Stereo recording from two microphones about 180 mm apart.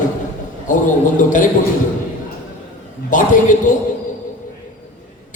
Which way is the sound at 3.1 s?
45° left (ahead or behind).